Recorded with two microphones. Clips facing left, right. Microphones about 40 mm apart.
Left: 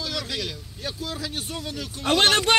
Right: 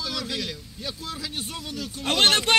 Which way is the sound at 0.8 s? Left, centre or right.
Left.